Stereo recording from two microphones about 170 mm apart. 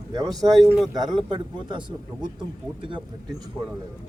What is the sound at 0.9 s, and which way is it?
Speech, 25° right (ahead or behind).